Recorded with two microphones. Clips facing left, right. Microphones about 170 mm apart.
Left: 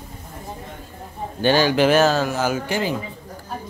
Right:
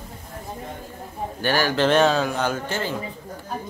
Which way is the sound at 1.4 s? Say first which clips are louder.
Left 4 dB; 20° left (ahead or behind).